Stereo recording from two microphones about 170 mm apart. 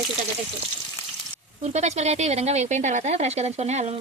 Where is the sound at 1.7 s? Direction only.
40° right (ahead or behind).